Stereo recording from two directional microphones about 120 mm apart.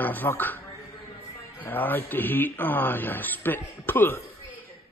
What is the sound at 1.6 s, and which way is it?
Speech, 15° left (ahead or behind).